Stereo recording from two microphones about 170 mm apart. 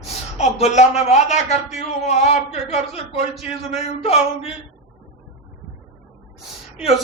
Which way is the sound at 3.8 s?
35° left (ahead or behind).